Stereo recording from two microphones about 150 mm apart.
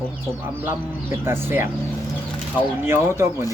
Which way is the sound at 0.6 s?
15° right (ahead or behind).